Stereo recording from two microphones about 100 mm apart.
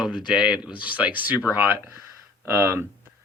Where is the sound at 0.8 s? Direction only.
15° right (ahead or behind).